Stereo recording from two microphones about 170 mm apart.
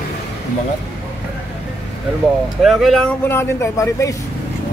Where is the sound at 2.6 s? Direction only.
Centre (ahead or behind).